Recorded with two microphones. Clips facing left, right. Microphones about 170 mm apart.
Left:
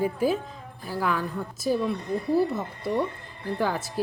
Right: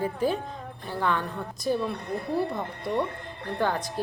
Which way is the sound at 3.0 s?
60° right (ahead or behind).